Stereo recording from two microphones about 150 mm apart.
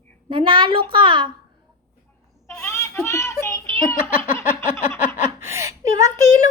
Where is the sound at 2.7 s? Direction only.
20° left (ahead or behind).